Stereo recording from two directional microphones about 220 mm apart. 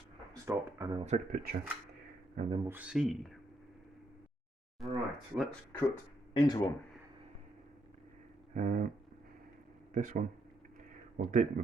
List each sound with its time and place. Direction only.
0.4 s speech: 15° right (ahead or behind)
1.0 s speech: 35° right (ahead or behind)
2.6 s speech: 5° right (ahead or behind)
4.8 s speech: centre (ahead or behind)
6.3 s speech: 20° left (ahead or behind)
8.5 s speech: 35° right (ahead or behind)
9.9 s speech: 40° right (ahead or behind)